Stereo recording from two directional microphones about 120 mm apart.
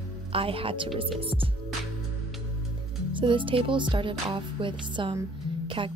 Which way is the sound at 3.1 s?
45° right (ahead or behind).